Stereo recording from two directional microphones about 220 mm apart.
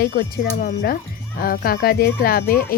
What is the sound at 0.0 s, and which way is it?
A woman's voice, 50° left (ahead or behind).